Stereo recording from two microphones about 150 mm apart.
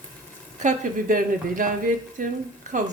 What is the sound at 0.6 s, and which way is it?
Speech, 60° right (ahead or behind).